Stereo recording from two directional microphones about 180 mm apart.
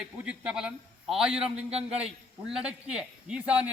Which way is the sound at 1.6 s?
35° right (ahead or behind).